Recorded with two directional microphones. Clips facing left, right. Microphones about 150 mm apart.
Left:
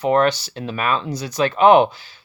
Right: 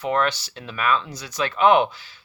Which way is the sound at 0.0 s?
40° left (ahead or behind).